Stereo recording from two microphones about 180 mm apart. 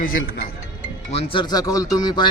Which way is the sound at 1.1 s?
30° left (ahead or behind).